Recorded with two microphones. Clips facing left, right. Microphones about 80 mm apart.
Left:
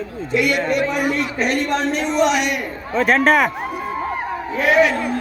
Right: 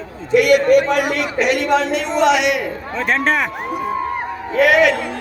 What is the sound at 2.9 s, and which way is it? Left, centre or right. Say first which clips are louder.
Speech: left 4 dB; left.